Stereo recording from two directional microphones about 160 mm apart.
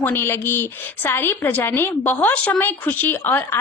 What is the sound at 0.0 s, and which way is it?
Speech, 15° left (ahead or behind).